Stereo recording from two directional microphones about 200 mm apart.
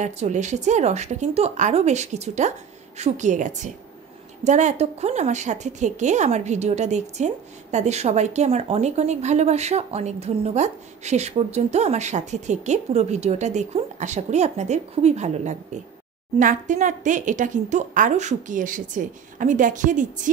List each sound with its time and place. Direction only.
0.0 s a woman's voice: 35° right (ahead or behind)